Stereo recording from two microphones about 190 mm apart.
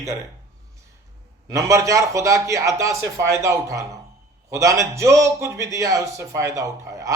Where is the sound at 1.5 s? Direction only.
15° right (ahead or behind).